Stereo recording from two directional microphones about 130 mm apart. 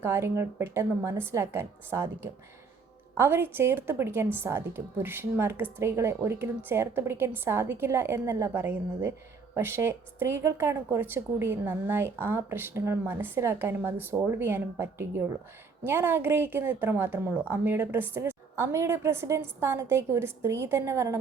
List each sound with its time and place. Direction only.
0.0 s a woman's voice: 20° right (ahead or behind)